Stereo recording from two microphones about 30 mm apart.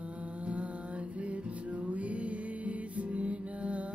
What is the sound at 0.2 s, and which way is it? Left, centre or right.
Music, right.